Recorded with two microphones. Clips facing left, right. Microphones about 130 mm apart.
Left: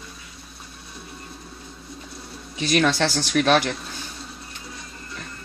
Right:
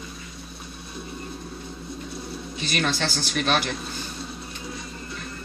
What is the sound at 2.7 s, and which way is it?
Speech, 80° left.